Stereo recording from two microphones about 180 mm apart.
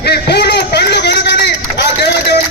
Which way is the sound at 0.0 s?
65° left (ahead or behind).